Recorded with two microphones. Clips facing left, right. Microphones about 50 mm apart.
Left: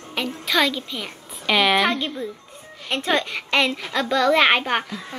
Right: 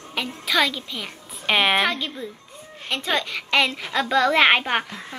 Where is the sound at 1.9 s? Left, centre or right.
Centre.